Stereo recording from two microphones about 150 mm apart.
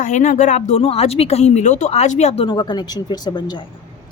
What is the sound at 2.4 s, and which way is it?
Speech, 30° left (ahead or behind).